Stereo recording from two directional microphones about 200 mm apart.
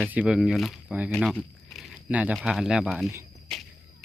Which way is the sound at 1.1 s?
5° left (ahead or behind).